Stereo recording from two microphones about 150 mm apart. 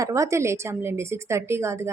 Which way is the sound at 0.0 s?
20° right (ahead or behind).